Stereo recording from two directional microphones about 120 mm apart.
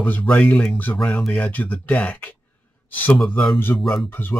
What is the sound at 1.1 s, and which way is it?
Speech, 5° left (ahead or behind).